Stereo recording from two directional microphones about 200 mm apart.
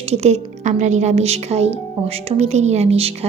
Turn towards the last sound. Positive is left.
turn(degrees=-30)  # may be behind; listen again after turning